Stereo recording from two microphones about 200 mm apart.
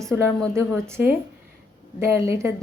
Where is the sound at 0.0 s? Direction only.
15° right (ahead or behind).